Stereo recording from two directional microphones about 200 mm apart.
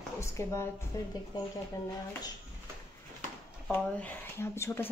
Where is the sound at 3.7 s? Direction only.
10° left (ahead or behind).